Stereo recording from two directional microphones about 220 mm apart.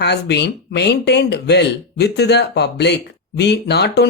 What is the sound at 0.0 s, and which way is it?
Speech, 50° left (ahead or behind).